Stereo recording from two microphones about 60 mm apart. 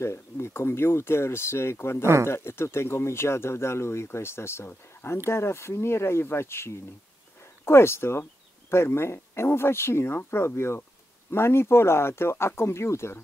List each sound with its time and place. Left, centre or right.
0.0 s speech: left